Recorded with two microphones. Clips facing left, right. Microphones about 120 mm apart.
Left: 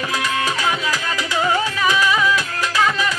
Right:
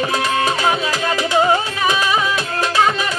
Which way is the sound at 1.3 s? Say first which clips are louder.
Right 3 dB; 25° right (ahead or behind).